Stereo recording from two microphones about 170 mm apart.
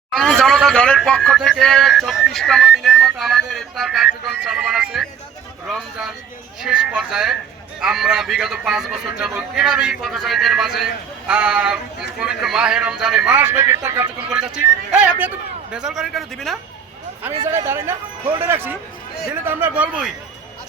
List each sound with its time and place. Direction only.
0.1 s speech: centre (ahead or behind)
6.6 s speech: 5° right (ahead or behind)
14.3 s speech: 5° right (ahead or behind)
17.5 s speech: 15° right (ahead or behind)